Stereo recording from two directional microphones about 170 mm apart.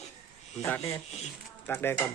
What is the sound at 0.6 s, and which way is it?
Speech, 20° left (ahead or behind).